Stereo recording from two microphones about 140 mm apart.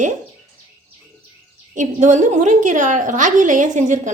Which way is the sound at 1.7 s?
60° right (ahead or behind).